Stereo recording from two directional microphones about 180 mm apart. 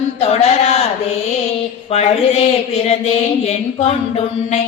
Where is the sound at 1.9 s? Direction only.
35° left (ahead or behind).